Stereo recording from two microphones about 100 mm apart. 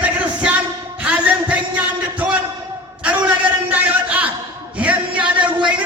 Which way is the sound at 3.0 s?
15° right (ahead or behind).